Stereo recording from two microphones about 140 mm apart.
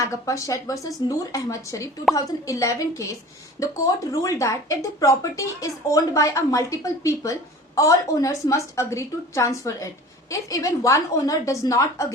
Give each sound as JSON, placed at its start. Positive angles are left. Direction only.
{"t": 0.0, "sound": "a woman's voice", "side_deg": 25}